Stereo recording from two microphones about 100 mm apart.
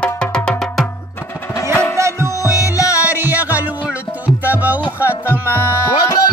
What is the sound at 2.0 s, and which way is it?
Music, 30° right (ahead or behind).